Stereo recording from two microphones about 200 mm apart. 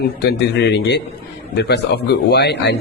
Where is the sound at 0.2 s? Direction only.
55° left (ahead or behind).